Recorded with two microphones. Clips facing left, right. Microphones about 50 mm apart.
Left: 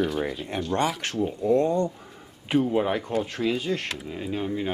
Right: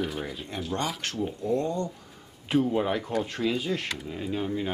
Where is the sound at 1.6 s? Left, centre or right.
Centre.